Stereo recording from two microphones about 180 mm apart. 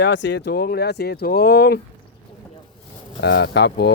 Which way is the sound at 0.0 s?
80° left.